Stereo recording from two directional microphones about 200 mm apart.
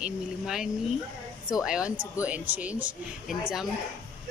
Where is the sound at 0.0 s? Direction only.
5° right (ahead or behind).